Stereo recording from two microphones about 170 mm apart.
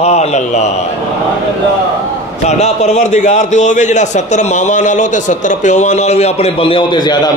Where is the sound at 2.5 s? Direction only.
40° left (ahead or behind).